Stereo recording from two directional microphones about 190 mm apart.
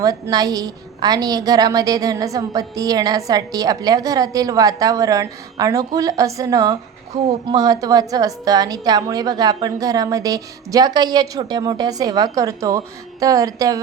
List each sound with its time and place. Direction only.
0.0 s a woman's voice: 20° right (ahead or behind)